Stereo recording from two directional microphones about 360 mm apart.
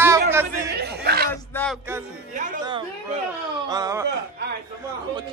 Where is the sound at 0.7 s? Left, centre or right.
Right.